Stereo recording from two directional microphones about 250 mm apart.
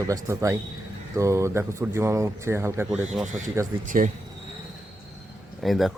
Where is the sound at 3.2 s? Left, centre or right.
Right.